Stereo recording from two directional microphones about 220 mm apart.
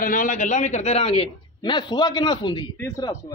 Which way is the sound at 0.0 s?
40° left (ahead or behind).